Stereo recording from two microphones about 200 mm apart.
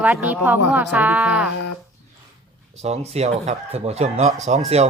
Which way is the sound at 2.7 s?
35° right (ahead or behind).